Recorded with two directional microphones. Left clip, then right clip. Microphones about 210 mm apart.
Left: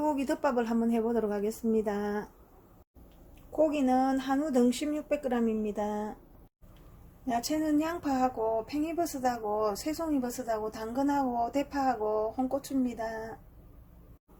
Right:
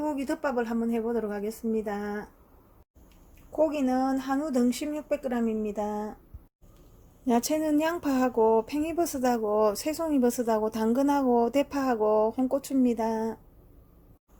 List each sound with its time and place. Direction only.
0.0 s a woman's voice: 5° right (ahead or behind)
3.5 s speech: 15° right (ahead or behind)
7.3 s speech: 40° right (ahead or behind)